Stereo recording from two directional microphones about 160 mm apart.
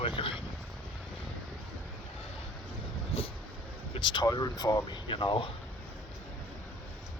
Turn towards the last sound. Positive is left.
turn(degrees=30)  # may be behind; listen again after turning